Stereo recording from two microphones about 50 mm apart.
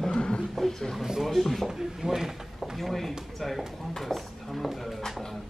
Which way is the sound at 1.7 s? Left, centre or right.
Centre.